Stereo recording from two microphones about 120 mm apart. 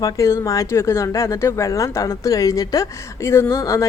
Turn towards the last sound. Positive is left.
turn(degrees=25)  # may be behind; listen again after turning